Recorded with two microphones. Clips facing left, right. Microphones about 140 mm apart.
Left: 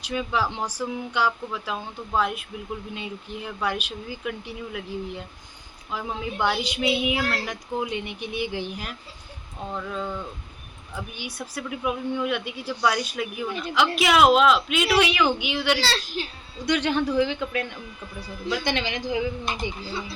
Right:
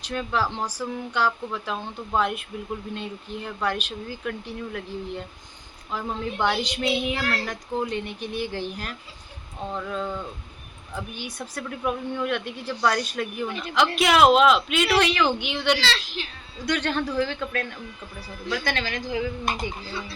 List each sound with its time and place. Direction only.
0.0 s speech: 5° left (ahead or behind)
11.2 s speech: 10° left (ahead or behind)
15.8 s speech: 40° left (ahead or behind)
16.6 s speech: 10° left (ahead or behind)